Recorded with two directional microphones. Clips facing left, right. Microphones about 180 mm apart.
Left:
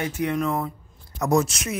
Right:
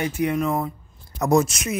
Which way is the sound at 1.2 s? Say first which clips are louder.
Right 2 dB; 20° right (ahead or behind).